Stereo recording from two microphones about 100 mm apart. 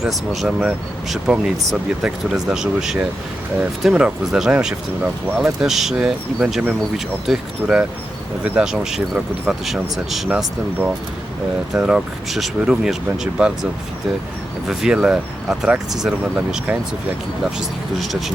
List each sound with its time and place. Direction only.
0.0 s speech: 5° right (ahead or behind)
10.2 s speech: 15° right (ahead or behind)
11.7 s speech: 5° right (ahead or behind)
14.7 s speech: 5° right (ahead or behind)